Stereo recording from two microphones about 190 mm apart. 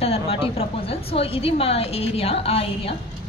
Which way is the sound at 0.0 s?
30° left (ahead or behind).